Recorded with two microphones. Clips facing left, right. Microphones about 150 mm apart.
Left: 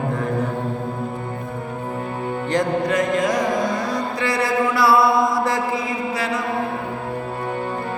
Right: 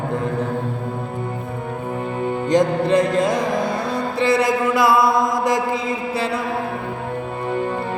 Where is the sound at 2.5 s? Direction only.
25° right (ahead or behind).